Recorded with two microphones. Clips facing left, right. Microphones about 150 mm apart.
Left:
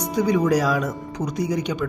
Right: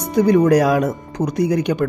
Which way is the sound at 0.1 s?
55° right (ahead or behind).